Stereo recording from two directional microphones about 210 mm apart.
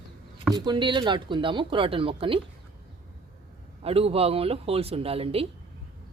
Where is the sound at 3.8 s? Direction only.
25° right (ahead or behind).